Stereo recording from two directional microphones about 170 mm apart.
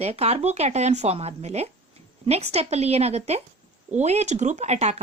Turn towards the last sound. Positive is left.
turn(degrees=-40)  # may be behind; listen again after turning